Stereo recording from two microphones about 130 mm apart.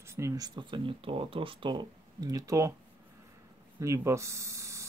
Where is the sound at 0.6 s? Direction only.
40° right (ahead or behind).